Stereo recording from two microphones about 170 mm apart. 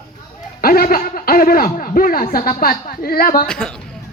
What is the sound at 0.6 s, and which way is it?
A man's voice, 60° left (ahead or behind).